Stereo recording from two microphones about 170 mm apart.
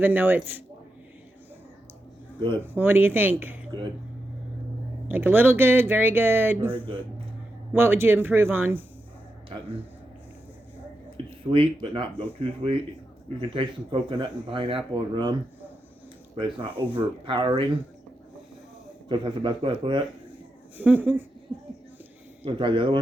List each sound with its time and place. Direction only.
0.0 s speech: 10° right (ahead or behind)
2.7 s speech: 10° right (ahead or behind)
5.0 s speech: 10° right (ahead or behind)
11.5 s speech: 30° right (ahead or behind)
19.0 s speech: 25° right (ahead or behind)
20.7 s speech: 10° right (ahead or behind)
22.4 s speech: 30° right (ahead or behind)